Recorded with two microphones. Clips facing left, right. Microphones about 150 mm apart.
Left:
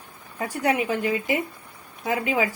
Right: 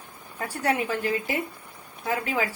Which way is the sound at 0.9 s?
15° left (ahead or behind).